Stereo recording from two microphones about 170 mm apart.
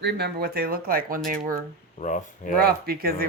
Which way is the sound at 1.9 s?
45° left (ahead or behind).